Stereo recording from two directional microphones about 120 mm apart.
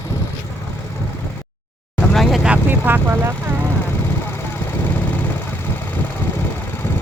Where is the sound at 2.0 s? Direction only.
5° left (ahead or behind).